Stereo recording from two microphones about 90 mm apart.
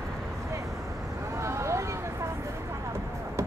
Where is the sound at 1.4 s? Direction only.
30° right (ahead or behind).